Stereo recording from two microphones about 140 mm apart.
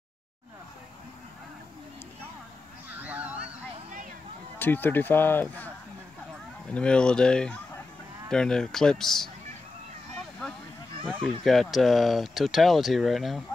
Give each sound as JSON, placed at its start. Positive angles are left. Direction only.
{"t": 2.9, "sound": "honk", "side_deg": -10}
{"t": 4.6, "sound": "speech", "side_deg": 15}
{"t": 6.7, "sound": "speech", "side_deg": 5}
{"t": 11.4, "sound": "speech", "side_deg": 0}